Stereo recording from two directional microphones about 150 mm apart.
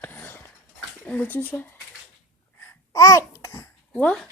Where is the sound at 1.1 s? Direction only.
10° left (ahead or behind).